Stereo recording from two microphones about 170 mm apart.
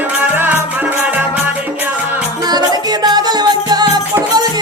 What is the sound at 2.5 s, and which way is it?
Music, 25° right (ahead or behind).